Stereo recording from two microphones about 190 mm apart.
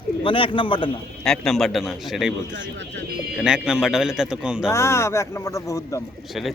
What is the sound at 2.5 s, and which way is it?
Speech, 70° right (ahead or behind).